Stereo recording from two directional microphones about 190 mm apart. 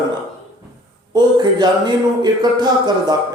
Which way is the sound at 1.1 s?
20° right (ahead or behind).